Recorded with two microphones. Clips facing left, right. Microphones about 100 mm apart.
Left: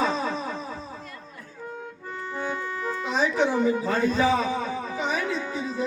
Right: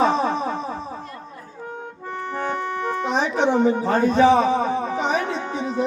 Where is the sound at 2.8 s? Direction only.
60° right (ahead or behind).